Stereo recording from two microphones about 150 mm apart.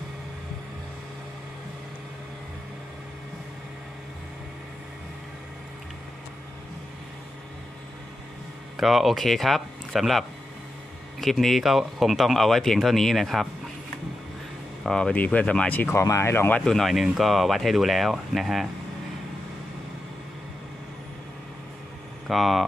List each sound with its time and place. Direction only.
8.7 s speech: centre (ahead or behind)
14.8 s speech: 5° left (ahead or behind)
22.3 s speech: centre (ahead or behind)